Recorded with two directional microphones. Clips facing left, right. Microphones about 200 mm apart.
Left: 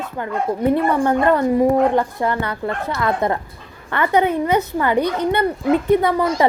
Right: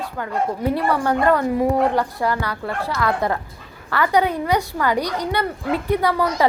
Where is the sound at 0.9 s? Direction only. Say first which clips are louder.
Left 2 dB; 20° left (ahead or behind).